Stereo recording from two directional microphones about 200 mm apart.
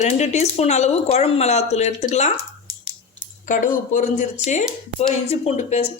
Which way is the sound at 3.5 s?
40° left (ahead or behind).